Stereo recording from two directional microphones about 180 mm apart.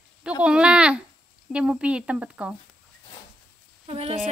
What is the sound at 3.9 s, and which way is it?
Speech, 35° right (ahead or behind).